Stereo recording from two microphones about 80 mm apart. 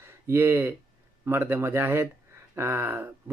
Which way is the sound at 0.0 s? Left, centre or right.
Right.